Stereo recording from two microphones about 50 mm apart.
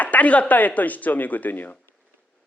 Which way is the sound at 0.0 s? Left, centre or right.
Left.